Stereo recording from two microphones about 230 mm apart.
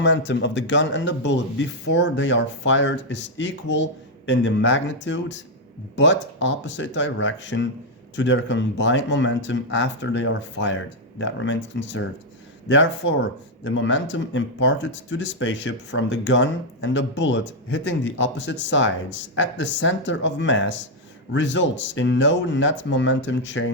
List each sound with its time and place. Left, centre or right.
0.0 s speech: left